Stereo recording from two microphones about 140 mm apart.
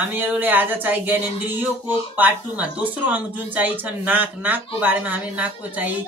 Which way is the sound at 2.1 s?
10° right (ahead or behind).